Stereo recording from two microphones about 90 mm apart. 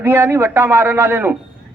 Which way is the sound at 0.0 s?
30° right (ahead or behind).